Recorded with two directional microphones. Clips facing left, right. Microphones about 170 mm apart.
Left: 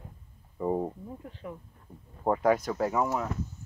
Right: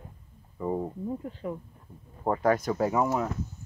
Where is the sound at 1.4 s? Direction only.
30° right (ahead or behind).